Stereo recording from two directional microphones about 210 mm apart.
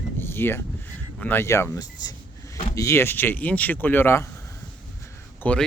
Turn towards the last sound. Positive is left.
turn(degrees=5)  # may be behind; listen again after turning